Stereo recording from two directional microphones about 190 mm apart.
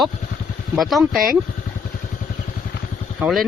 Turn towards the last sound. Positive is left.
turn(degrees=0)  # may be behind; listen again after turning